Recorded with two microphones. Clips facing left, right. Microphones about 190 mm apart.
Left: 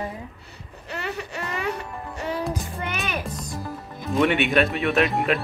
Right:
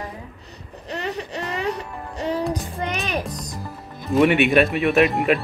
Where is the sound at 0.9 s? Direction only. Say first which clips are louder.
Right 3 dB; 35° right (ahead or behind).